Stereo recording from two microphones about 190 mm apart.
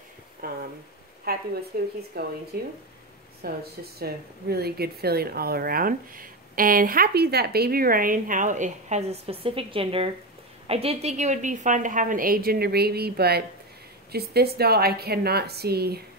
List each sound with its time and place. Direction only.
0.4 s a woman's voice: 50° right (ahead or behind)